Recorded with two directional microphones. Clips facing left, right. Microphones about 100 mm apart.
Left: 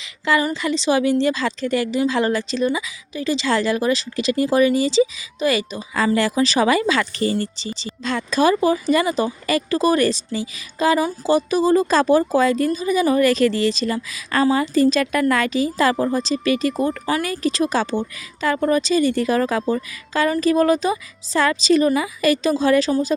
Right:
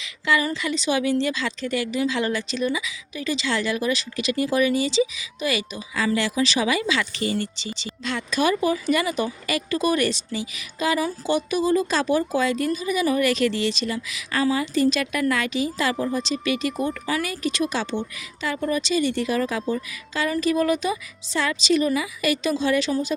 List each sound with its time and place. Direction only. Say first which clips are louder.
0.3 s a woman's voice: left 3 dB; 30° left (ahead or behind)